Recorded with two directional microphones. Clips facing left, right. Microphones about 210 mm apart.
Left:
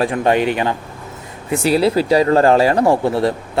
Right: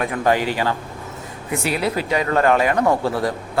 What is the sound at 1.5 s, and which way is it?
Speech, 30° left (ahead or behind).